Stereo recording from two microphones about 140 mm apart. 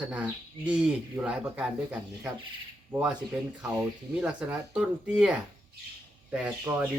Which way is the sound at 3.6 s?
10° right (ahead or behind).